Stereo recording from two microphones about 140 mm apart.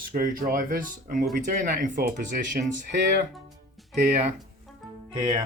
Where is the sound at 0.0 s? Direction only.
90° right; by 2.6 s 75° right (ahead or behind).